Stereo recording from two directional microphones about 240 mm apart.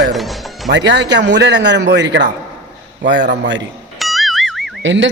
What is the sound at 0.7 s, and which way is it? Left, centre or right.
A woman's voice, right.